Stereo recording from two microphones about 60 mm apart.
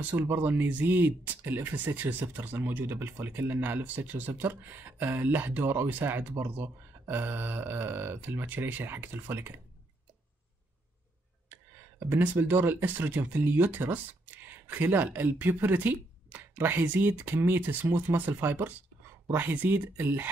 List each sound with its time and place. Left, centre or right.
0.3 s speech: right
12.1 s speech: right